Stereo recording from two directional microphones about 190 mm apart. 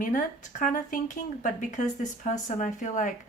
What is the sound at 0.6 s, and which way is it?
Speech, 45° left (ahead or behind).